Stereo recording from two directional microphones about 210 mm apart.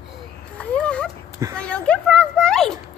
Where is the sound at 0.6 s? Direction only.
5° left (ahead or behind).